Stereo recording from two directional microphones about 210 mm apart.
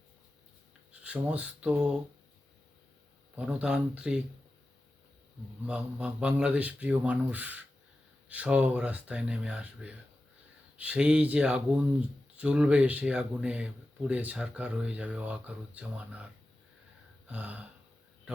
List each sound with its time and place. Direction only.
1.0 s speech: 5° right (ahead or behind)
3.3 s speech: 5° right (ahead or behind)
5.6 s speech: 5° right (ahead or behind)
17.2 s a sound: 5° right (ahead or behind)